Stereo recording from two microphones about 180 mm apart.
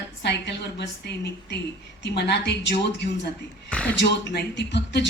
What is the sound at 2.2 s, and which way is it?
Speech, 70° left (ahead or behind).